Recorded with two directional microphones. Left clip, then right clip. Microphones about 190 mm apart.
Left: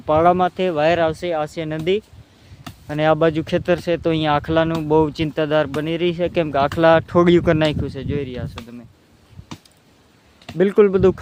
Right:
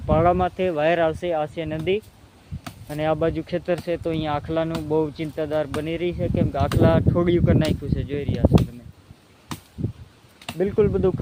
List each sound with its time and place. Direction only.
0.1 s speech: 30° left (ahead or behind)
2.8 s speech: 50° left (ahead or behind)
9.5 s a sound: 60° right (ahead or behind)
10.6 s speech: 60° left (ahead or behind)